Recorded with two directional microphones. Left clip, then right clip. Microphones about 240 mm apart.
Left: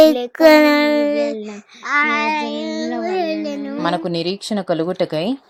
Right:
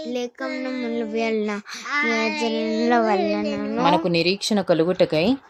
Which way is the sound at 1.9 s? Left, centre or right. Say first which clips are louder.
Left 6 dB; left.